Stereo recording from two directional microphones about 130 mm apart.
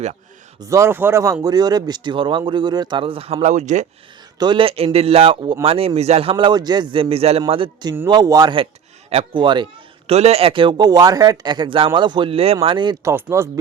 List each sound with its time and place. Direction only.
0.6 s speech: 20° right (ahead or behind); by 3.3 s 45° right (ahead or behind)
3.4 s speech: 65° right (ahead or behind)
4.4 s a man's voice: 40° right (ahead or behind)
7.5 s speech: 40° right (ahead or behind)
9.0 s speech: 55° right (ahead or behind)
9.4 s speech: 35° right (ahead or behind)
10.1 s speech: 50° right (ahead or behind)
12.6 s speech: 35° right (ahead or behind)
13.3 s speech: 20° right (ahead or behind)